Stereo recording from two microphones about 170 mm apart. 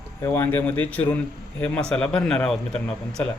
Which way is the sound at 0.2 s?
15° left (ahead or behind).